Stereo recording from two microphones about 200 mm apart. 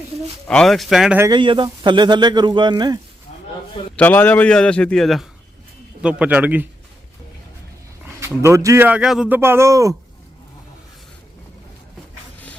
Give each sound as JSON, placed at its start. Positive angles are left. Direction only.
{"t": 0.4, "sound": "a man's voice", "side_deg": 5}
{"t": 1.2, "sound": "speech", "side_deg": -25}
{"t": 3.9, "sound": "a man's voice", "side_deg": 10}
{"t": 8.2, "sound": "a man's voice", "side_deg": -15}